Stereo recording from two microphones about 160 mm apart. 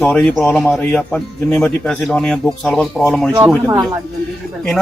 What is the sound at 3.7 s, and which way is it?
Speech, 25° right (ahead or behind).